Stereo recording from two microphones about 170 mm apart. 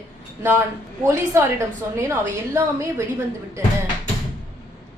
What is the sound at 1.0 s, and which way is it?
A woman's voice, 15° right (ahead or behind).